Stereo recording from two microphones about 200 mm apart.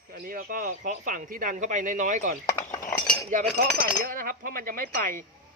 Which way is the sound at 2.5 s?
15° left (ahead or behind).